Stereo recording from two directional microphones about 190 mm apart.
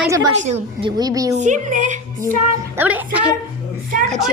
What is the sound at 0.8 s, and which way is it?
Speech, 20° right (ahead or behind).